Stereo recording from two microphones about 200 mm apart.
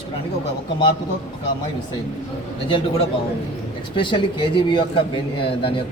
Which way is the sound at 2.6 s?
25° left (ahead or behind).